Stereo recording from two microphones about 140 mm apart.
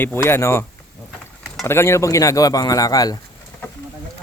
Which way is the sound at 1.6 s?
20° left (ahead or behind).